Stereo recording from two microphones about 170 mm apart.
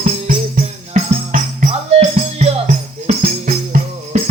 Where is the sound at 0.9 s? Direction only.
40° right (ahead or behind).